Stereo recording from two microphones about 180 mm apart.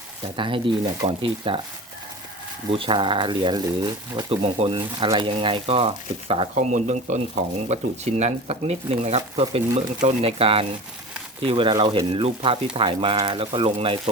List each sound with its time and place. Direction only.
0.3 s speech: 30° right (ahead or behind)
2.7 s speech: 30° right (ahead or behind)
4.3 s speech: 35° right (ahead or behind)